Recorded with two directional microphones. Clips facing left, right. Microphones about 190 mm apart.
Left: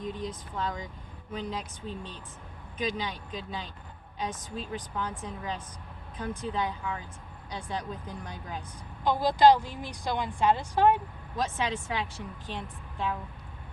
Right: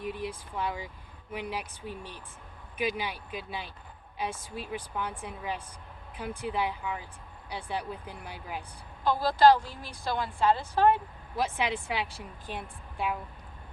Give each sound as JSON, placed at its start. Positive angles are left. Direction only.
{"t": 0.0, "sound": "speech", "side_deg": -10}
{"t": 9.0, "sound": "a woman's voice", "side_deg": 15}
{"t": 11.3, "sound": "speech", "side_deg": -15}